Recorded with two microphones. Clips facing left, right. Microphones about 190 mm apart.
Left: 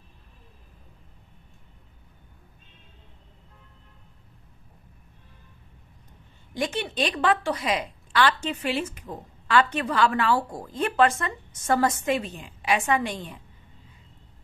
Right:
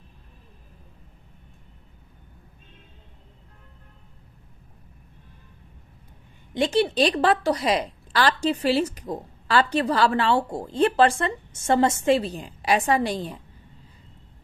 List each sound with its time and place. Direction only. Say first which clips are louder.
6.5 s a woman's voice: right 7 dB; 30° right (ahead or behind)